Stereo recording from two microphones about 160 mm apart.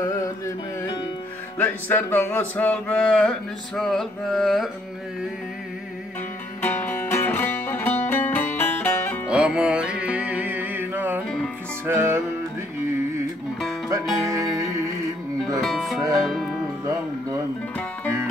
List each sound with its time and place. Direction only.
1.6 s a sound: 10° left (ahead or behind)
6.6 s music: 10° left (ahead or behind)
9.3 s music: 5° right (ahead or behind)
14.3 s music: 20° right (ahead or behind)
15.6 s music: centre (ahead or behind)